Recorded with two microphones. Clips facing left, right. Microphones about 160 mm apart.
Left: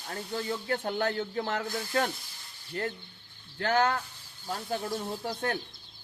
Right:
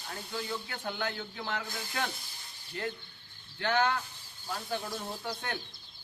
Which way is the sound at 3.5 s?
40° left (ahead or behind).